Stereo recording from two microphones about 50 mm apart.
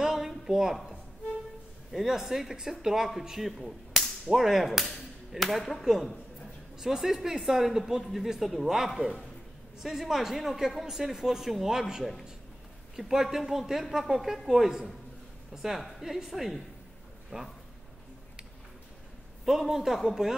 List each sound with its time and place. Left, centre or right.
0.0 s a sound: centre
1.9 s speech: centre
3.1 s whip: centre
4.3 s speech: centre
17.3 s speech: centre
19.4 s speech: centre